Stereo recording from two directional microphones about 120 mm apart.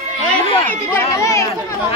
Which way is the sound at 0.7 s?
25° left (ahead or behind).